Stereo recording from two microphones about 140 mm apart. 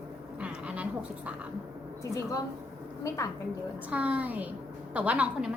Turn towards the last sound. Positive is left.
turn(degrees=-10)  # may be behind; listen again after turning